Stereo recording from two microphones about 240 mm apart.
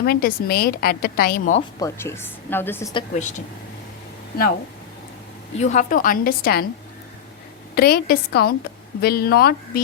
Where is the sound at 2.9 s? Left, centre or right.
Left.